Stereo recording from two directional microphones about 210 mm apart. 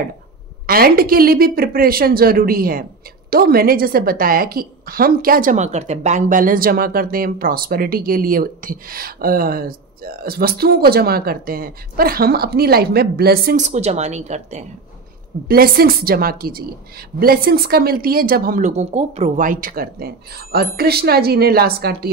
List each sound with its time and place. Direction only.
0.7 s a woman's voice: 45° right (ahead or behind)
15.4 s a woman's voice: 45° right (ahead or behind)